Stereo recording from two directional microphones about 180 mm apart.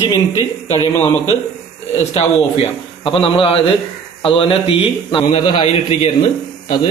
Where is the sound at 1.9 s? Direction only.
35° left (ahead or behind).